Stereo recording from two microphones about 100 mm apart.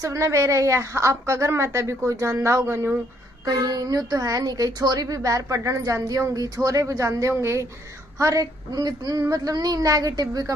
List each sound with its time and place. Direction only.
0.0 s a woman's voice: 30° right (ahead or behind)
3.4 s speech: 40° right (ahead or behind)